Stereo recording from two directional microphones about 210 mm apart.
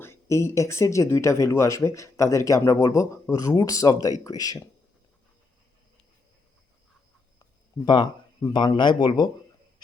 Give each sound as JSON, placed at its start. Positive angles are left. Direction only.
{"t": 0.0, "sound": "speech", "side_deg": 15}
{"t": 7.9, "sound": "speech", "side_deg": 20}